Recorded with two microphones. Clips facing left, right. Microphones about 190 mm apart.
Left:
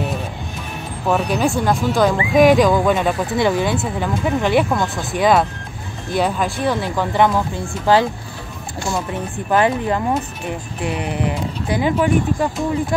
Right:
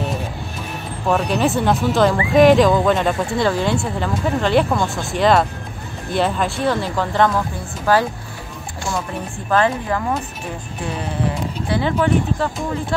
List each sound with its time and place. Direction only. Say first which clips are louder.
1.0 s speech: even; centre (ahead or behind); by 8.0 s 15° left (ahead or behind)
9.5 s speech: left 1 dB; 20° left (ahead or behind)